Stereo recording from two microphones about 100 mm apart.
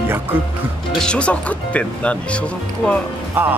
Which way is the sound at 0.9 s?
10° left (ahead or behind).